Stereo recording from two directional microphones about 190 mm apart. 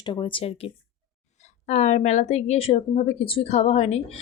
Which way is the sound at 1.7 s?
35° left (ahead or behind).